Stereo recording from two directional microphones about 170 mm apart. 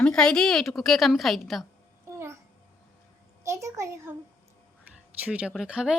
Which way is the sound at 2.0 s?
15° right (ahead or behind).